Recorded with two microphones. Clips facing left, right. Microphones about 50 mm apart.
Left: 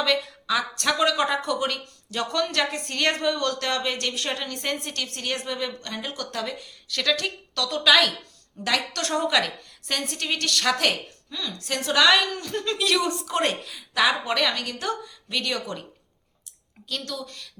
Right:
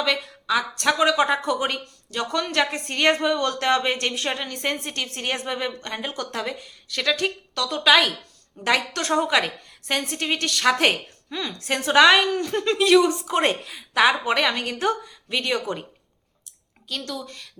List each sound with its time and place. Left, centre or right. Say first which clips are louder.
0.0 s a woman's voice: even; centre
2.0 s a woman's voice: even; centre
10.8 s a woman's voice: right 4 dB; right
16.9 s a woman's voice: right 1 dB; centre